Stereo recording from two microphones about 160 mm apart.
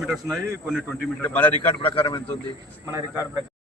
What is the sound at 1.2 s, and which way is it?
Speech, 10° left (ahead or behind).